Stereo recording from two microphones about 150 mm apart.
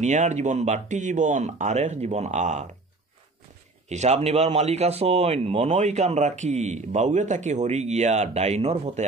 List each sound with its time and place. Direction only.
0.0 s speech: 50° right (ahead or behind)
3.9 s speech: 50° right (ahead or behind)